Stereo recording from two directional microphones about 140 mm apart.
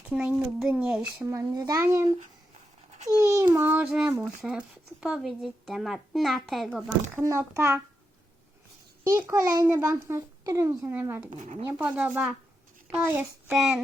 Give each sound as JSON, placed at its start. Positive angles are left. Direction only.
{"t": 0.0, "sound": "speech", "side_deg": -10}
{"t": 1.3, "sound": "a child's voice", "side_deg": -25}
{"t": 3.2, "sound": "speech", "side_deg": -20}
{"t": 7.2, "sound": "a child's voice", "side_deg": -20}
{"t": 9.0, "sound": "a child's voice", "side_deg": -20}
{"t": 11.3, "sound": "speech", "side_deg": -60}
{"t": 11.8, "sound": "speech", "side_deg": -10}